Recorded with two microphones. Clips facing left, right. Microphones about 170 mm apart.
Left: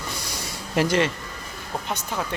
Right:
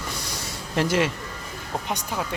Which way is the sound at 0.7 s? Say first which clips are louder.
Left 1 dB; 5° right (ahead or behind).